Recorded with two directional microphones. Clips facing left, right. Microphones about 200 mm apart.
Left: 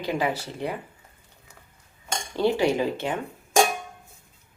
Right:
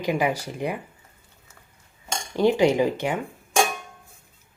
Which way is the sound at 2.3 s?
15° right (ahead or behind).